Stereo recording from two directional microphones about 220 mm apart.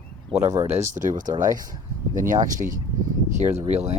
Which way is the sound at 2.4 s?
35° right (ahead or behind).